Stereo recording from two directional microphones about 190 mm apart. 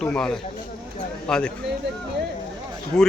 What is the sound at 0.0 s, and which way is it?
Speech, 5° left (ahead or behind).